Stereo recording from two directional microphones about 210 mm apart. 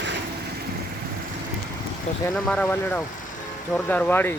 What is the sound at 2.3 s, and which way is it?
Speech, 5° left (ahead or behind).